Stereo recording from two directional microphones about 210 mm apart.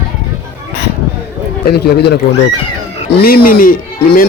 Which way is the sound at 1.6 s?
50° left (ahead or behind).